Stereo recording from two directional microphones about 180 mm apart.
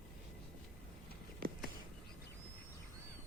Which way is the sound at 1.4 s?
55° right (ahead or behind).